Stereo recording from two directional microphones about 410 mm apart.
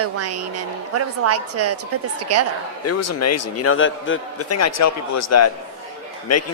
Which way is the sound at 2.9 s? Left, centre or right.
Left.